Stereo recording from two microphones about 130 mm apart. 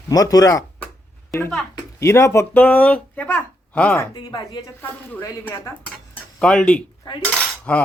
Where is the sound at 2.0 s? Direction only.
20° left (ahead or behind).